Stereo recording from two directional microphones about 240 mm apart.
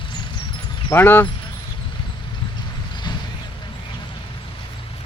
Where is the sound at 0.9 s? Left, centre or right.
Centre.